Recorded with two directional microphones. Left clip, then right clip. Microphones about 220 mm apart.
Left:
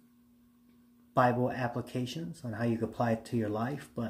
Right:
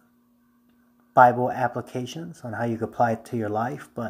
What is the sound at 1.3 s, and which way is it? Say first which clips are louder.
Speech: right 9 dB; 40° right (ahead or behind).